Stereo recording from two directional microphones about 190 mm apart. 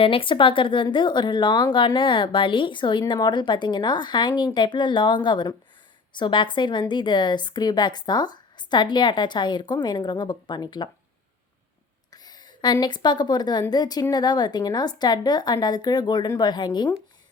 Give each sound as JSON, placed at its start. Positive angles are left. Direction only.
{"t": 0.0, "sound": "speech", "side_deg": 30}
{"t": 12.1, "sound": "speech", "side_deg": 20}